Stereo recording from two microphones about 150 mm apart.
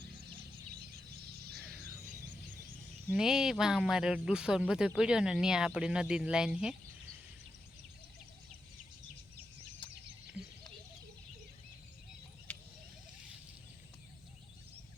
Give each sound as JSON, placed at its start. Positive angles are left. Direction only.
{"t": 0.8, "sound": "fowl", "side_deg": -90}
{"t": 3.1, "sound": "speech", "side_deg": -5}
{"t": 12.5, "sound": "cricket", "side_deg": 10}